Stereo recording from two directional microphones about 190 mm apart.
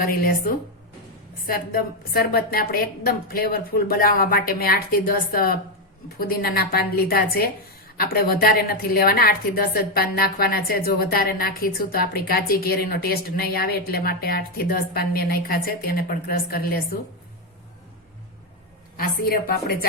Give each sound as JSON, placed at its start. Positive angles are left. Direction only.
{"t": 0.0, "sound": "a woman's voice", "side_deg": 50}
{"t": 18.9, "sound": "a woman's voice", "side_deg": 50}